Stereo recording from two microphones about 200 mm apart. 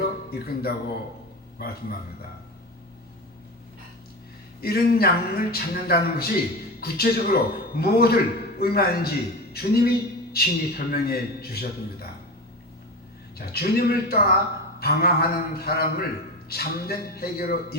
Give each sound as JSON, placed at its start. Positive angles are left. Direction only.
{"t": 0.0, "sound": "music", "side_deg": 50}
{"t": 4.6, "sound": "a man's voice", "side_deg": 50}
{"t": 13.4, "sound": "a man's voice", "side_deg": 50}